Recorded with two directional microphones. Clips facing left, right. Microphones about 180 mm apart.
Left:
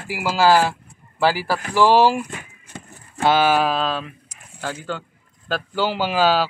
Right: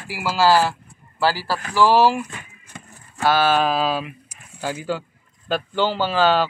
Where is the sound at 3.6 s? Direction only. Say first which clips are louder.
Right 1 dB; 5° right (ahead or behind).